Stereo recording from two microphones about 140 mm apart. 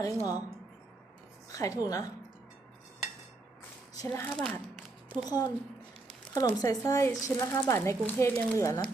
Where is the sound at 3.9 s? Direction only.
25° left (ahead or behind).